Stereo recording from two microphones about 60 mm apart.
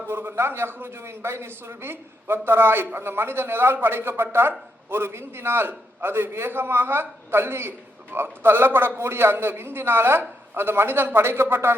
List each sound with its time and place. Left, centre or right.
0.1 s a man's voice: right